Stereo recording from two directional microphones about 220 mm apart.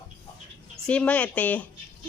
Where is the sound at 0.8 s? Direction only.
5° left (ahead or behind).